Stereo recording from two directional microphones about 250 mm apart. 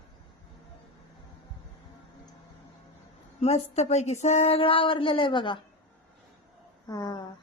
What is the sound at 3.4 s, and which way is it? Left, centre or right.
Speech, left.